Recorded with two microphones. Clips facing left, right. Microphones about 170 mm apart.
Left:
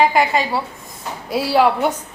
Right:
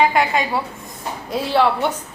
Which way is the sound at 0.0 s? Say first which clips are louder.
Left 1 dB; 5° left (ahead or behind).